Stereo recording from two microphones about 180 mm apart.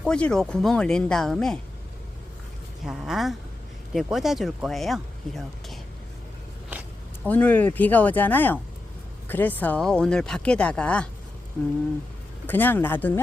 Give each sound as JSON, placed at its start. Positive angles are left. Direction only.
{"t": 0.0, "sound": "speech", "side_deg": 5}
{"t": 2.8, "sound": "speech", "side_deg": 0}
{"t": 7.3, "sound": "speech", "side_deg": 10}
{"t": 12.5, "sound": "speech", "side_deg": 10}